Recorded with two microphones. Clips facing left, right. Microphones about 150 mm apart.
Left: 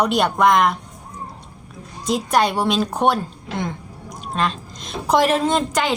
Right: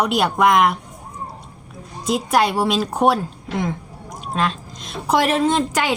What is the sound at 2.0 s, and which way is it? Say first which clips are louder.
Speech: even; 5° right (ahead or behind).